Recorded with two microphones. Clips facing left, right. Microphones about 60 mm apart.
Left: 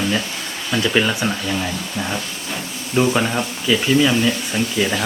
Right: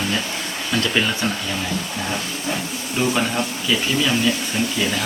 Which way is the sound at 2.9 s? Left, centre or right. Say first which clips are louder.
Left 3 dB; centre.